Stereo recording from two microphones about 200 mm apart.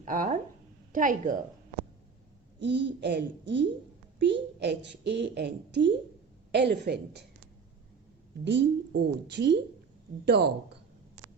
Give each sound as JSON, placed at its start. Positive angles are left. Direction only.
{"t": 0.0, "sound": "a woman's voice", "side_deg": -40}
{"t": 2.6, "sound": "a woman's voice", "side_deg": -60}
{"t": 8.4, "sound": "a woman's voice", "side_deg": -60}